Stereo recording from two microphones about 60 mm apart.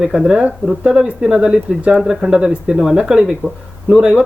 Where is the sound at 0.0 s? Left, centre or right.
Centre.